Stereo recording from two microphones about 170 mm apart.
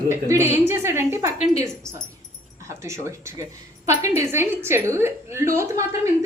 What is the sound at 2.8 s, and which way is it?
A woman's voice, 15° right (ahead or behind).